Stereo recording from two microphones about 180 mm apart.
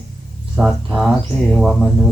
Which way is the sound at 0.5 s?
Centre (ahead or behind).